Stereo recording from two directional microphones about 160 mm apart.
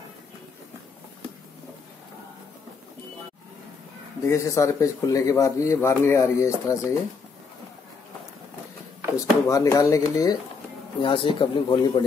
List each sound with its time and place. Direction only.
4.3 s speech: 20° left (ahead or behind)
9.1 s speech: 20° left (ahead or behind)
11.0 s speech: 30° left (ahead or behind)